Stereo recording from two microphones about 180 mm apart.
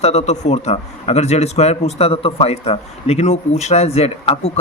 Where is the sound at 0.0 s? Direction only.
35° left (ahead or behind).